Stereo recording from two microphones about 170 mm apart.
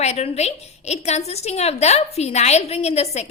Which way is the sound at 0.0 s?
40° left (ahead or behind).